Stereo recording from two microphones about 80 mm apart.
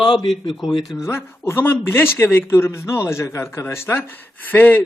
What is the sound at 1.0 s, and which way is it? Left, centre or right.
Speech, left.